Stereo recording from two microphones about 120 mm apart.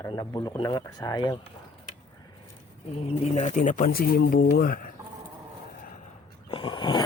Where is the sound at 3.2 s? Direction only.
80° left.